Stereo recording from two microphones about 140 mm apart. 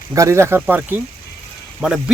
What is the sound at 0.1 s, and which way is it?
Speech, 20° right (ahead or behind).